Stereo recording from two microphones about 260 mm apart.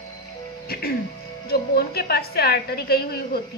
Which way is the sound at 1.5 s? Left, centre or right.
Left.